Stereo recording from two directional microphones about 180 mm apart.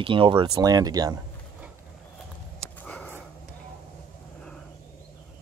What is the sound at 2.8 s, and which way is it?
Sniff, 5° left (ahead or behind).